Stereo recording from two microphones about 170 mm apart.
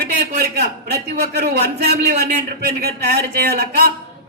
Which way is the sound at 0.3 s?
75° right (ahead or behind).